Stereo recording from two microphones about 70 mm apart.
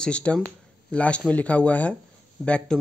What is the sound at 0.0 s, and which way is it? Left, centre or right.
Speech, centre.